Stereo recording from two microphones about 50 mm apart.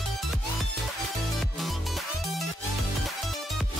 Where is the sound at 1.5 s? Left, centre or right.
Centre.